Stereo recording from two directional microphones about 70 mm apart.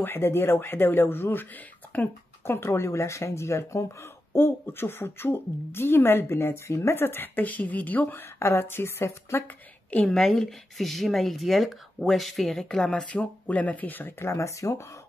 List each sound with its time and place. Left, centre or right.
0.0 s speech: left
2.4 s speech: left
10.0 s speech: centre; by 14.3 s left
14.3 s speech: left